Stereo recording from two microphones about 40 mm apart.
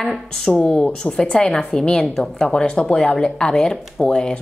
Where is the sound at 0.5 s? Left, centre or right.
Left.